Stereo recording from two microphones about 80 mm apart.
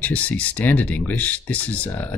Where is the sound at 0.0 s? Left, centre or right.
Centre.